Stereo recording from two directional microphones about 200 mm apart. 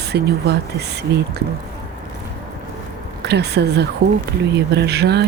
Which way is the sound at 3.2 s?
55° right (ahead or behind).